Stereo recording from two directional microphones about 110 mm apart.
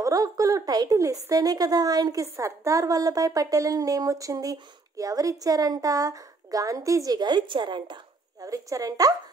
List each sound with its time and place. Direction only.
0.0 s a woman's voice: 30° right (ahead or behind)
8.5 s a woman's voice: 30° right (ahead or behind)